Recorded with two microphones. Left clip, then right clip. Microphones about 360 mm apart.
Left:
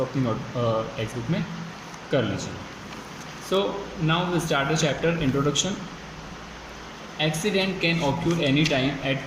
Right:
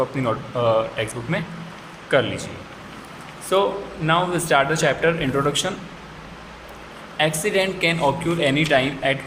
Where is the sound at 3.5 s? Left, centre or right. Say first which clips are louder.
Right 5 dB; centre.